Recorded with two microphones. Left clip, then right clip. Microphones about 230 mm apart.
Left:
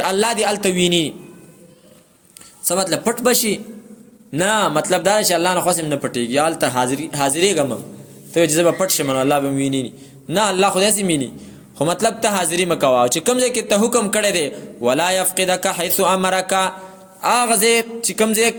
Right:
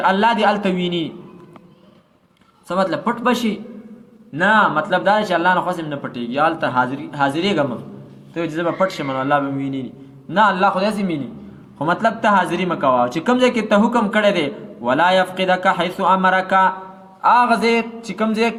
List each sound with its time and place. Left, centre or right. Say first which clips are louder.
0.0 s a man's voice: right 3 dB; left
2.7 s a man's voice: even; left
17.2 s mantra: right 3 dB; left